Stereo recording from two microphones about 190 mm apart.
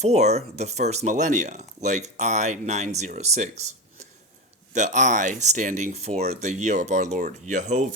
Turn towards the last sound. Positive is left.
turn(degrees=-40)  # may be behind; listen again after turning